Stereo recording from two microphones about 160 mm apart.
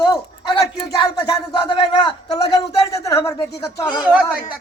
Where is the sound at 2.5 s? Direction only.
20° left (ahead or behind).